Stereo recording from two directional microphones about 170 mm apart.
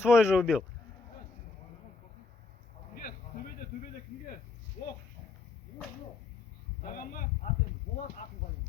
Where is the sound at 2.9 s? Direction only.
60° left (ahead or behind).